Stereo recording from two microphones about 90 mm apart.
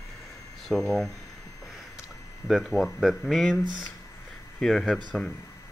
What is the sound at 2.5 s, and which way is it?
Speech, 5° right (ahead or behind).